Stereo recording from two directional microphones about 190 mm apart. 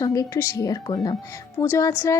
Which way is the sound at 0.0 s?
20° left (ahead or behind).